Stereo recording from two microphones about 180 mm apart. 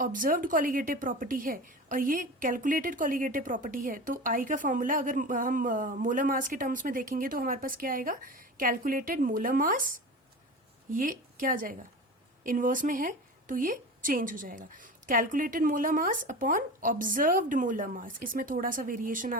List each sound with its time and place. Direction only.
0.0 s a woman's voice: 50° right (ahead or behind)